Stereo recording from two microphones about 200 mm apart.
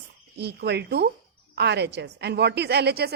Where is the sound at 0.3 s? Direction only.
55° right (ahead or behind).